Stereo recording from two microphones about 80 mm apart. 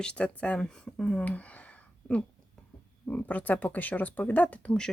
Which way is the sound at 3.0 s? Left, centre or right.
Centre.